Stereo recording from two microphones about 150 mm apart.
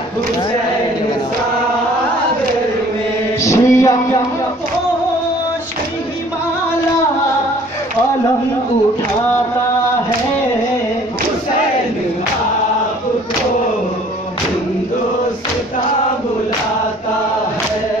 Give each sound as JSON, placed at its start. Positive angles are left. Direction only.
{"t": 3.3, "sound": "music", "side_deg": 20}